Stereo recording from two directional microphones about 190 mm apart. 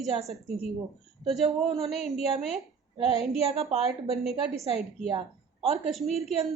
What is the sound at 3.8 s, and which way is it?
Speech, 35° left (ahead or behind).